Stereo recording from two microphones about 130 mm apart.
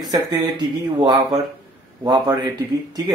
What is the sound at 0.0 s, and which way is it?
Speech, 35° right (ahead or behind).